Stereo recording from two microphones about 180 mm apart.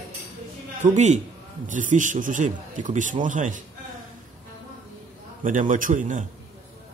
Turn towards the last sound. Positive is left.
turn(degrees=-45)  # may be behind; listen again after turning